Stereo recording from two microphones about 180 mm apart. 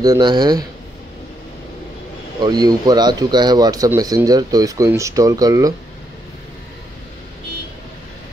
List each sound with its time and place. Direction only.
0.0 s speech: 20° right (ahead or behind)
2.4 s speech: 20° right (ahead or behind)